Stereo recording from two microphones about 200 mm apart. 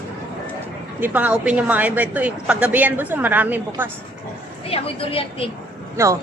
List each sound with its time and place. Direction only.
0.9 s a woman's voice: 10° right (ahead or behind)
4.7 s a woman's voice: 25° left (ahead or behind)
6.0 s a woman's voice: 15° right (ahead or behind)